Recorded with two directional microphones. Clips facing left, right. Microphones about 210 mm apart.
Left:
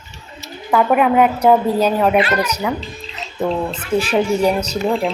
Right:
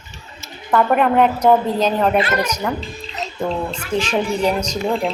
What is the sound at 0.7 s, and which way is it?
A woman's voice, 5° left (ahead or behind).